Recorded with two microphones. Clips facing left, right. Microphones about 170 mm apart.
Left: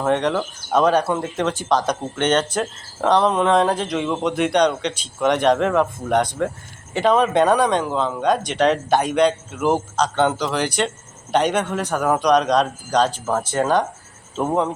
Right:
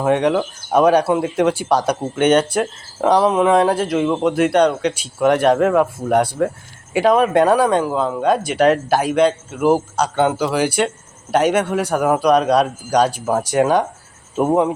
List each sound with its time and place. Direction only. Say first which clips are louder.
0.0 s speech: right 4 dB; 10° right (ahead or behind)